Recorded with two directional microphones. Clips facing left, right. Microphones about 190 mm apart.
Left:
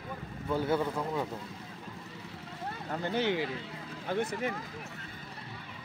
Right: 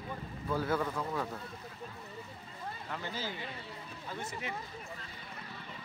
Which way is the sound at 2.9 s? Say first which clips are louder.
Left 11 dB; 55° left (ahead or behind).